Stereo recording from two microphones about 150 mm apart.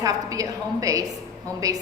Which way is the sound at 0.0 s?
25° right (ahead or behind).